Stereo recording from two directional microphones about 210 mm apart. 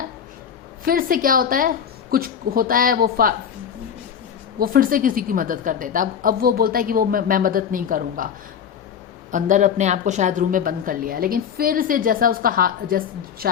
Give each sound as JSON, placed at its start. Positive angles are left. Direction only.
{"t": 0.9, "sound": "a woman's voice", "side_deg": -40}
{"t": 4.6, "sound": "a woman's voice", "side_deg": -45}
{"t": 9.3, "sound": "a woman's voice", "side_deg": -35}